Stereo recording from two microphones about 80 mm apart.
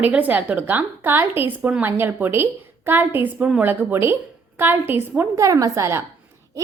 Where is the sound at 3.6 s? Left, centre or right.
Right.